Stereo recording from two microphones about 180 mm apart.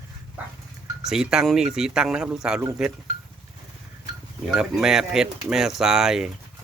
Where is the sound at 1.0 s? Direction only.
5° right (ahead or behind).